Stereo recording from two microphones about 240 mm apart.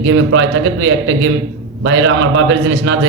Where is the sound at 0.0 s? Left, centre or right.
Right.